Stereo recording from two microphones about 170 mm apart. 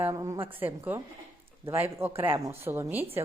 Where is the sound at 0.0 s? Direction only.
20° right (ahead or behind).